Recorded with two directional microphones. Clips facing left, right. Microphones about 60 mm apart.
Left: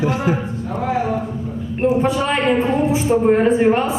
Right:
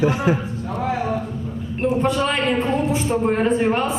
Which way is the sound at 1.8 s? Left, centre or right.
Centre.